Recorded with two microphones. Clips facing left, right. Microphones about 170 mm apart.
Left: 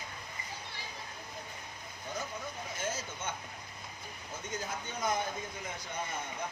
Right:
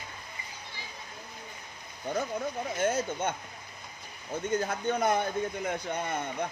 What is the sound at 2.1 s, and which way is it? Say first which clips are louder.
Speech: right 9 dB; 60° right (ahead or behind).